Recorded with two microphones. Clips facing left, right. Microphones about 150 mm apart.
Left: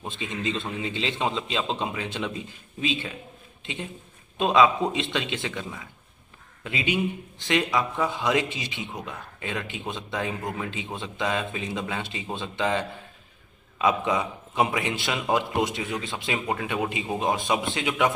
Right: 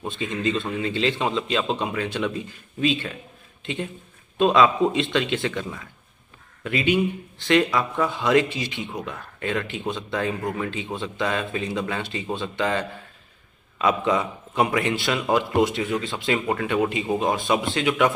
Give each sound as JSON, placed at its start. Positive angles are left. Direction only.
{"t": 0.1, "sound": "speech", "side_deg": 20}
{"t": 4.4, "sound": "a man's voice", "side_deg": 20}